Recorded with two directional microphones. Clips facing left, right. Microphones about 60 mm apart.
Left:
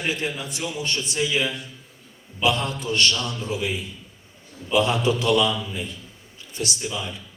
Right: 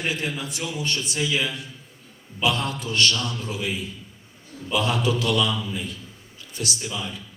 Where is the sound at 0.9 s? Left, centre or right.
Left.